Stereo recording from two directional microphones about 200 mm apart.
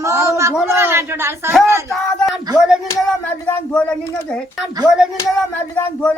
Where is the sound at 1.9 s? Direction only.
Centre (ahead or behind).